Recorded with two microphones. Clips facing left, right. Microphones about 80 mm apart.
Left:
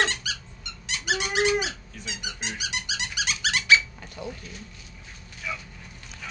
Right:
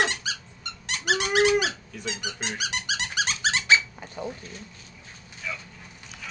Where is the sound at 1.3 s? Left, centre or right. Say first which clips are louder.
Right 3 dB; right.